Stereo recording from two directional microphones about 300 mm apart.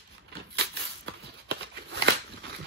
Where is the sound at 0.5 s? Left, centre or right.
Right.